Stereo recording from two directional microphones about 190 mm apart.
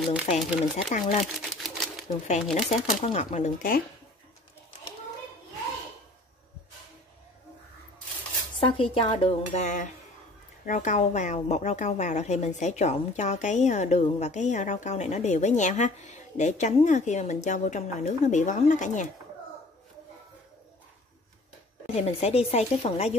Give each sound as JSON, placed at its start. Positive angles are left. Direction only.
{"t": 0.3, "sound": "a woman's voice", "side_deg": 35}
{"t": 1.2, "sound": "speech", "side_deg": 0}
{"t": 2.7, "sound": "a woman's voice", "side_deg": 35}
{"t": 8.5, "sound": "cutlery", "side_deg": 25}
{"t": 10.6, "sound": "a woman's voice", "side_deg": 40}
{"t": 21.8, "sound": "a woman's voice", "side_deg": 35}